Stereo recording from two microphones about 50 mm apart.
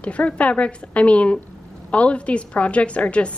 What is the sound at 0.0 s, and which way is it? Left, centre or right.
A woman's voice, left.